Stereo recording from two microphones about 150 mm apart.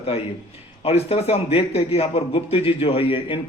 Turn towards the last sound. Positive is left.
turn(degrees=40)  # may be behind; listen again after turning